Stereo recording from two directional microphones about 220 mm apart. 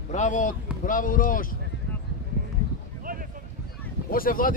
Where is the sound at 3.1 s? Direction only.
40° right (ahead or behind).